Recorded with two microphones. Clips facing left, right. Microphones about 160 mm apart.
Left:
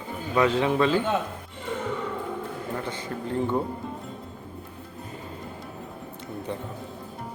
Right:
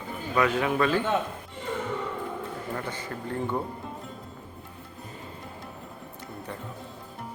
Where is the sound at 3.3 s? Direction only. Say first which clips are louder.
Left 4 dB; 20° left (ahead or behind).